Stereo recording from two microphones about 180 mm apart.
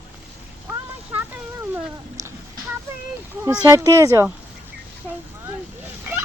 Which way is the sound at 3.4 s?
15° right (ahead or behind).